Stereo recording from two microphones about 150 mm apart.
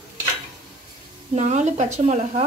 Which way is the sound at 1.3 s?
50° right (ahead or behind).